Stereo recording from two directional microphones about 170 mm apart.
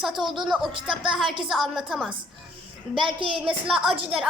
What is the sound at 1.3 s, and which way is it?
Speech, 30° right (ahead or behind).